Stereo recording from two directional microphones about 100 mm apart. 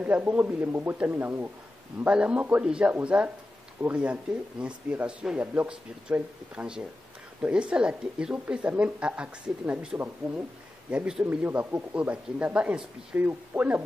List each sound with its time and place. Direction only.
0.0 s a woman's voice: 15° right (ahead or behind)